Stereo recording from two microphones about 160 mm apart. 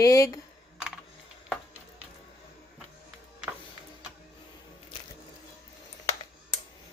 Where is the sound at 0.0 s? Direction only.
20° left (ahead or behind).